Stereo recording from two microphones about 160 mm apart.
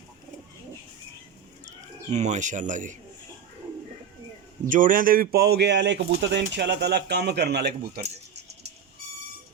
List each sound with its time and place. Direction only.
1.6 s speech: 45° right (ahead or behind)
4.7 s speech: 55° right (ahead or behind)